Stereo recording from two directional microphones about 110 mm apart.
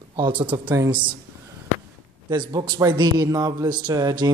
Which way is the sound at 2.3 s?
40° right (ahead or behind).